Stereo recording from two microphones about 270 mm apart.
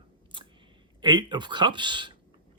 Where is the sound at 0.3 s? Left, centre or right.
Centre.